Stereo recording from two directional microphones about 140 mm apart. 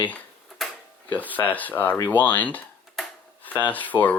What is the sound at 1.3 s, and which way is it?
Speech, 10° left (ahead or behind).